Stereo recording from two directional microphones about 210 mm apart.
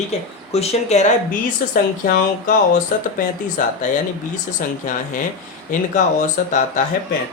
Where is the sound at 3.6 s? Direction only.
40° left (ahead or behind).